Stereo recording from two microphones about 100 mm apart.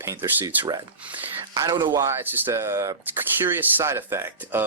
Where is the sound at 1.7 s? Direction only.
45° right (ahead or behind).